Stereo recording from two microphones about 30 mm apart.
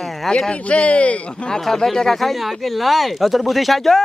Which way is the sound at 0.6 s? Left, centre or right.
Left.